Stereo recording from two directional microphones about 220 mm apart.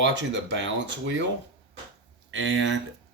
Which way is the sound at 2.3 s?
60° right (ahead or behind).